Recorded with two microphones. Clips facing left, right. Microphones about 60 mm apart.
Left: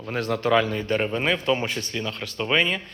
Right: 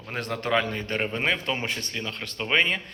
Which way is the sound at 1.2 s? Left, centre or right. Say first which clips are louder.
Left 4 dB; right.